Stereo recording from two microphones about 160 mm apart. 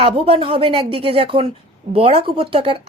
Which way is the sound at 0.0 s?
35° right (ahead or behind).